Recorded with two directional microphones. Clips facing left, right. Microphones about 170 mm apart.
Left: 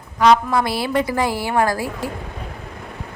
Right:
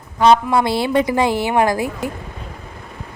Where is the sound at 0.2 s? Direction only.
25° right (ahead or behind).